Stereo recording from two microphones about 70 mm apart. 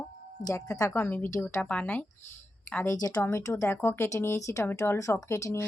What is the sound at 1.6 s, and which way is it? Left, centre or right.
Speech, centre.